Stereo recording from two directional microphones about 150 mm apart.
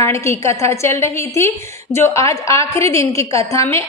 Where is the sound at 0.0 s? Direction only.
20° left (ahead or behind).